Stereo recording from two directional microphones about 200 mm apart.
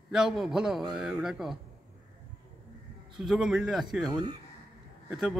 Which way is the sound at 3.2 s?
Centre (ahead or behind).